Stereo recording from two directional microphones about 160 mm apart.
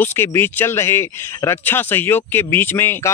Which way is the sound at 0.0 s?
15° left (ahead or behind).